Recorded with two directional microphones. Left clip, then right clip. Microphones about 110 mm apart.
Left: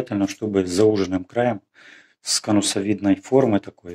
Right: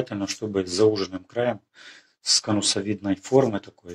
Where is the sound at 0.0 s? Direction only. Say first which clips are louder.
Left 4 dB; 40° left (ahead or behind).